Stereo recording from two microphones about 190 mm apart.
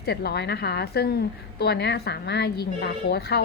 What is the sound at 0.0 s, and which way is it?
A woman's voice, 55° left (ahead or behind).